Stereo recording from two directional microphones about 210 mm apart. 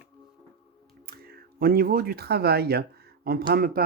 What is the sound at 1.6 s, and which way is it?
Speech, 45° right (ahead or behind).